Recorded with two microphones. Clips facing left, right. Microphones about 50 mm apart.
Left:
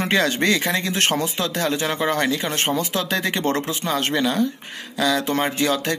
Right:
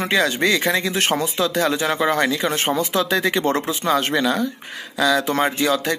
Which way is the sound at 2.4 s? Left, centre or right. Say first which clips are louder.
Right 2 dB; centre.